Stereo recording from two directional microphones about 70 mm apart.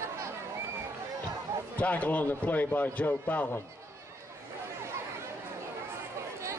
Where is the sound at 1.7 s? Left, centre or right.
Left.